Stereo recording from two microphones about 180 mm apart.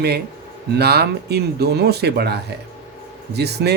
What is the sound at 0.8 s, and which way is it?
Speech, 65° right (ahead or behind).